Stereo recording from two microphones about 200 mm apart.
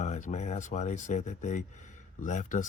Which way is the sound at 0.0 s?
35° left (ahead or behind).